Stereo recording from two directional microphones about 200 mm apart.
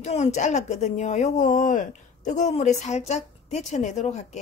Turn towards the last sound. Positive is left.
turn(degrees=35)  # may be behind; listen again after turning